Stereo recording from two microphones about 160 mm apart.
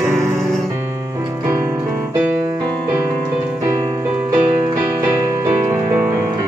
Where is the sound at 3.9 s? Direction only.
20° right (ahead or behind).